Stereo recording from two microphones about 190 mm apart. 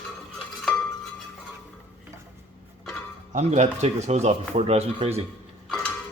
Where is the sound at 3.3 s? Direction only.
40° right (ahead or behind).